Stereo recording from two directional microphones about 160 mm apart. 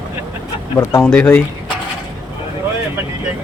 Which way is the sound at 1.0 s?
10° left (ahead or behind).